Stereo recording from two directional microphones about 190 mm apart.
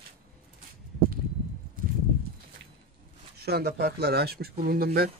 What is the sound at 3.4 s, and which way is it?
Speech, 55° right (ahead or behind).